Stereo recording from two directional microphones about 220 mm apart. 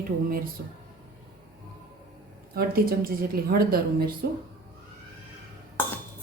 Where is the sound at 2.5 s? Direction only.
45° right (ahead or behind).